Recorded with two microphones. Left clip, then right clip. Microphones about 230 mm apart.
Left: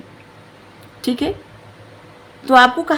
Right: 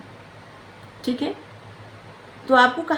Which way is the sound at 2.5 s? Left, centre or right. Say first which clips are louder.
Left 5 dB; left.